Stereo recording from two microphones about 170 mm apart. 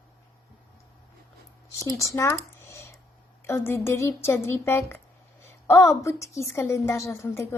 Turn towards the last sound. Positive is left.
turn(degrees=15)  # may be behind; listen again after turning